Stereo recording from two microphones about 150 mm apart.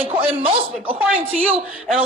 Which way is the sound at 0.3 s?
35° right (ahead or behind).